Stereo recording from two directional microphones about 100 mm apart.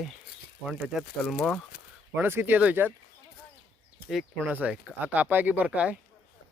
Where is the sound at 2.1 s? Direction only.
25° right (ahead or behind).